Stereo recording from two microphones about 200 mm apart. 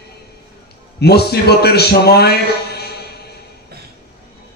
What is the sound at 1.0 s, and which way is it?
A man's voice, 55° left (ahead or behind).